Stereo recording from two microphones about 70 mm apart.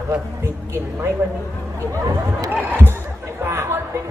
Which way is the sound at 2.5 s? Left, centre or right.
Right.